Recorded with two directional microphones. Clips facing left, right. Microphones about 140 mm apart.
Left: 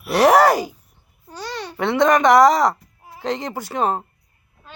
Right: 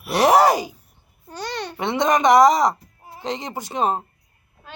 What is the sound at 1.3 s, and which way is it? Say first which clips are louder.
Babbling: right 1 dB; 65° right (ahead or behind).